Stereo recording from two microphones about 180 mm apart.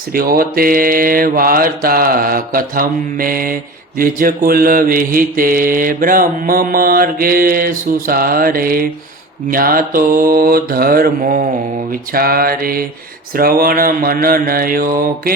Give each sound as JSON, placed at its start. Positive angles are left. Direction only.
{"t": 0.1, "sound": "mantra", "side_deg": -55}